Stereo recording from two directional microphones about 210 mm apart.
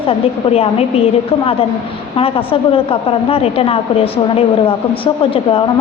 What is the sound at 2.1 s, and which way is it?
A woman's voice, 25° left (ahead or behind).